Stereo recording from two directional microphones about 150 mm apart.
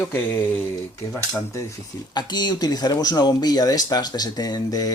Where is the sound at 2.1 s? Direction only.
30° left (ahead or behind).